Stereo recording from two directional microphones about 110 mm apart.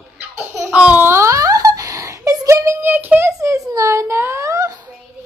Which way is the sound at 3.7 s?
30° right (ahead or behind).